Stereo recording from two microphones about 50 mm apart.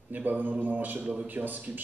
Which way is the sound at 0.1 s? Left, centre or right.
Right.